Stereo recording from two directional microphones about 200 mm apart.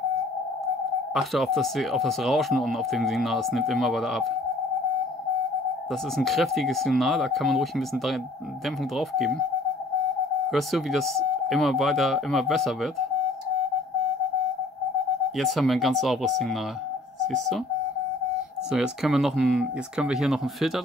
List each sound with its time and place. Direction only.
1.1 s speech: centre (ahead or behind)
6.1 s speech: centre (ahead or behind)
8.9 s speech: centre (ahead or behind)
10.5 s speech: centre (ahead or behind)
15.3 s speech: centre (ahead or behind)
18.7 s speech: 5° right (ahead or behind)